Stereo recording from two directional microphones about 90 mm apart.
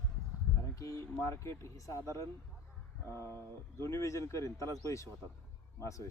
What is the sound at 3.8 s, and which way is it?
Speech, 30° left (ahead or behind).